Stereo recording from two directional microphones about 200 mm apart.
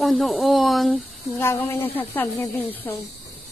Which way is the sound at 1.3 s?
10° left (ahead or behind).